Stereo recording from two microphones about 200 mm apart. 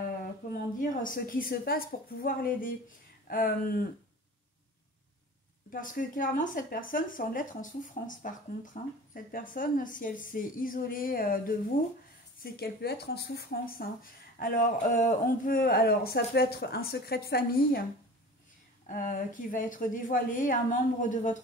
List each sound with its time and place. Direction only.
0.5 s speech: 45° left (ahead or behind)
5.7 s speech: 40° left (ahead or behind)
12.5 s speech: 55° left (ahead or behind)
18.9 s speech: 45° left (ahead or behind)